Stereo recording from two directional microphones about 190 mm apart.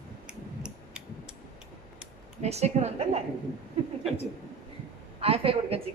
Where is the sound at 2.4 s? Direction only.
35° right (ahead or behind).